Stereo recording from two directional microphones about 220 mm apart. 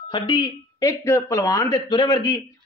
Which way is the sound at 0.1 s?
20° left (ahead or behind).